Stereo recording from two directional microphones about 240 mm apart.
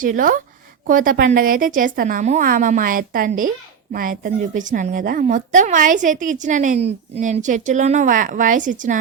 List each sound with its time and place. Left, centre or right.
0.0 s a woman's voice: right